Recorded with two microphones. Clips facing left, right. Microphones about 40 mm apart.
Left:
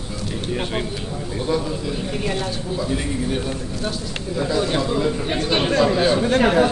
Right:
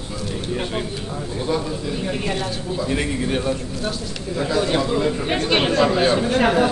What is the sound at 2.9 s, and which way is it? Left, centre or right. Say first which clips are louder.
Speech: right 3 dB; right.